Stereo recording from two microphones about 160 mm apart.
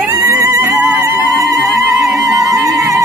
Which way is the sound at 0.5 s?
10° right (ahead or behind).